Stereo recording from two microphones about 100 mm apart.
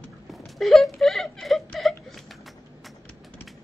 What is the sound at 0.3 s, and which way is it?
Speech, centre (ahead or behind).